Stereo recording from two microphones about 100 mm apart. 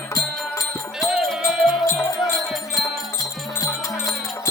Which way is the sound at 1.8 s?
30° left (ahead or behind).